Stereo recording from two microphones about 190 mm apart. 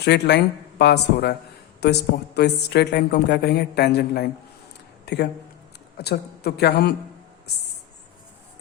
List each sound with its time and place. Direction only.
0.0 s a woman's voice: 65° left (ahead or behind)